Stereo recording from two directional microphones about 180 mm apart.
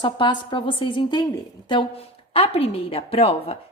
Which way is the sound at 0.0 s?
25° left (ahead or behind).